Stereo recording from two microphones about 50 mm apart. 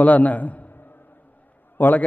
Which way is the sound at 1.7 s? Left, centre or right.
Left.